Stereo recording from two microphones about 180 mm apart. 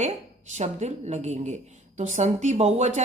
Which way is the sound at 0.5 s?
40° right (ahead or behind).